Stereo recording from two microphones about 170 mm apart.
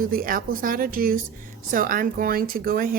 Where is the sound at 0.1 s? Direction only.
55° right (ahead or behind).